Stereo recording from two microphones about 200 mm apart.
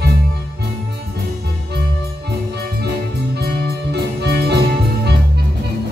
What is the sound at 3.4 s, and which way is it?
Music, 55° right (ahead or behind).